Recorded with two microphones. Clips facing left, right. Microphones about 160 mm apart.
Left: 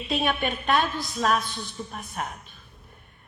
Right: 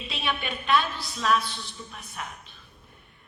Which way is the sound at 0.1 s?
45° left (ahead or behind).